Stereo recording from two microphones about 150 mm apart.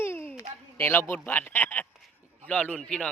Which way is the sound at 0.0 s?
15° left (ahead or behind).